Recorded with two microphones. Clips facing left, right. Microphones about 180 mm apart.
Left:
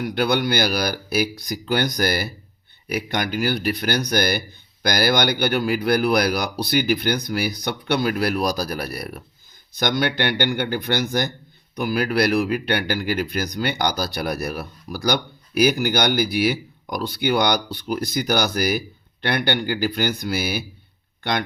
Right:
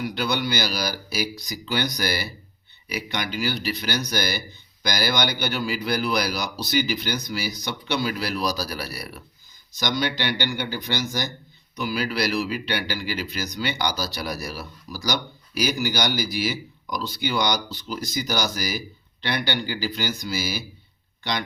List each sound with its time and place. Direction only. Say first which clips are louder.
0.0 s speech: left 5 dB; 55° left (ahead or behind)